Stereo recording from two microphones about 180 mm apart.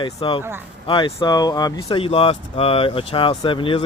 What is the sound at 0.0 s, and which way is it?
Speech, 25° left (ahead or behind).